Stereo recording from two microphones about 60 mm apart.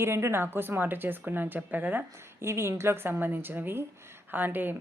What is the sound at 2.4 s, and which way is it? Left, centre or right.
Speech, right.